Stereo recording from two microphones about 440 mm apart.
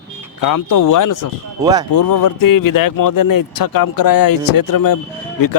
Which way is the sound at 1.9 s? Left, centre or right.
Left.